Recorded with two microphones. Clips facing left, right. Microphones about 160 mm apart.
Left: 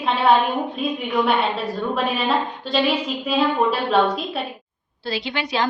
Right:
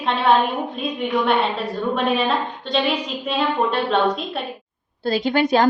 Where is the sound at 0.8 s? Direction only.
5° left (ahead or behind).